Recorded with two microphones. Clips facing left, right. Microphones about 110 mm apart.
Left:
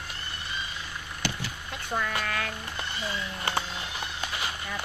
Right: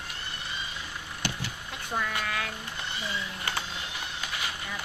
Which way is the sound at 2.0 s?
5° right (ahead or behind).